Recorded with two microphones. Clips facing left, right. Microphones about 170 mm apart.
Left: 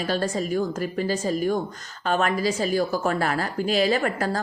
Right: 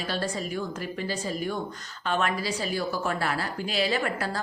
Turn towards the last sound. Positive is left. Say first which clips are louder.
# left 5 dB
turn(degrees=45)  # may be behind; listen again after turning